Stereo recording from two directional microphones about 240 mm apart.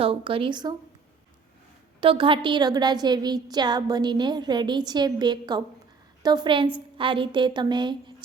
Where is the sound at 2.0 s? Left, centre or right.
Right.